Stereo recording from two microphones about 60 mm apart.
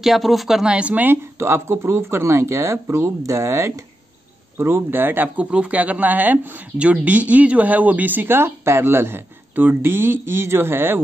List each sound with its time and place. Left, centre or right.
0.0 s speech: centre
0.7 s speech: right
1.0 s speech: right
4.6 s speech: right
5.4 s speech: centre; by 11.0 s right